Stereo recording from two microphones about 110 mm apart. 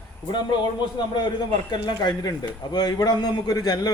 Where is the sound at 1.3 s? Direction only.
40° left (ahead or behind).